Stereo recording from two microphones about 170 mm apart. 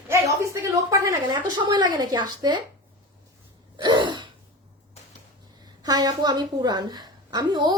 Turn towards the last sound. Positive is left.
turn(degrees=-25)  # may be behind; listen again after turning